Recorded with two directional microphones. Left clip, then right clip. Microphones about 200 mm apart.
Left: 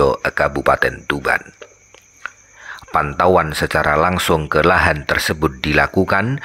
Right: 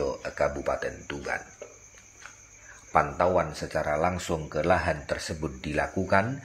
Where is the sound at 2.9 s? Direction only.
35° left (ahead or behind).